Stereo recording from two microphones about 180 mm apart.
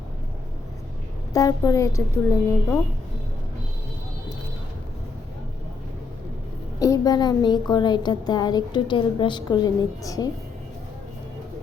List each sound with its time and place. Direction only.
1.3 s a woman's voice: 20° left (ahead or behind)
6.7 s a woman's voice: 20° left (ahead or behind)